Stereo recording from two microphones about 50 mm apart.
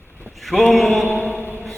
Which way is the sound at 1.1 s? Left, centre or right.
Left.